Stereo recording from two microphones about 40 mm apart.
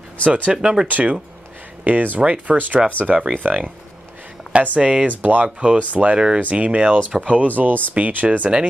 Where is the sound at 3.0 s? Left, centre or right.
Right.